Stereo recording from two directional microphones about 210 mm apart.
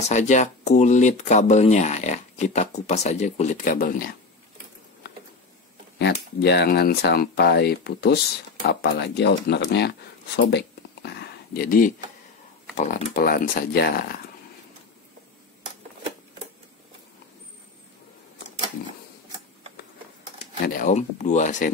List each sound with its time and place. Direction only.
0.0 s speech: 35° left (ahead or behind)
6.4 s speech: 50° left (ahead or behind)
10.5 s a sound: 50° left (ahead or behind)
12.7 s speech: 40° left (ahead or behind)
20.6 s speech: 40° left (ahead or behind)